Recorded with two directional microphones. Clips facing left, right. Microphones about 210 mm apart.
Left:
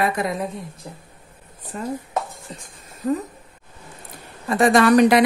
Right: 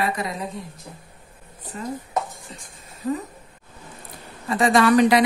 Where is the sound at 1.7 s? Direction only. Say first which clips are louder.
Left 3 dB; 45° left (ahead or behind).